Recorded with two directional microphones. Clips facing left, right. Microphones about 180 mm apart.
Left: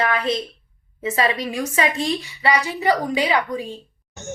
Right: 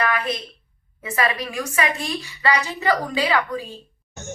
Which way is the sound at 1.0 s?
25° left (ahead or behind).